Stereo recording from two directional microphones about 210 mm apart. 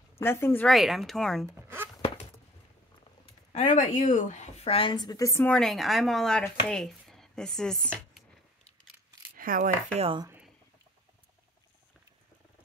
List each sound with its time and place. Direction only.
0.2 s speech: 10° left (ahead or behind)
1.4 s zipper: 10° right (ahead or behind)
3.3 s speech: 35° left (ahead or behind); by 8.2 s 5° left (ahead or behind)
9.4 s chopping: 40° right (ahead or behind)
9.9 s speech: 25° right (ahead or behind)